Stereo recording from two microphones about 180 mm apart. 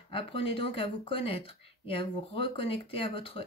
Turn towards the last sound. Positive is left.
turn(degrees=30)  # may be behind; listen again after turning